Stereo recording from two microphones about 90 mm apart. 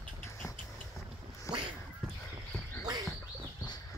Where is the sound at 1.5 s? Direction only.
35° left (ahead or behind).